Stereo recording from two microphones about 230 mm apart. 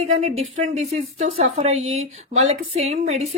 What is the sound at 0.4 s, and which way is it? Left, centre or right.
Speech, right.